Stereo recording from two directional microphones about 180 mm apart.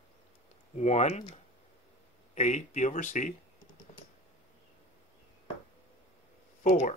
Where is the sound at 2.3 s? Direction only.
40° left (ahead or behind).